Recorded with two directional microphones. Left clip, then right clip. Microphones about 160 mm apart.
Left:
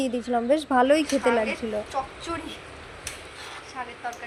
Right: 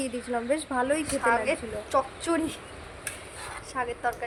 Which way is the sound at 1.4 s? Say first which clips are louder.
Left 1 dB; 90° right.